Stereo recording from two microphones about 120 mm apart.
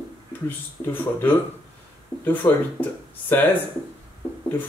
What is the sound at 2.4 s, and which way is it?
Speech, 15° left (ahead or behind).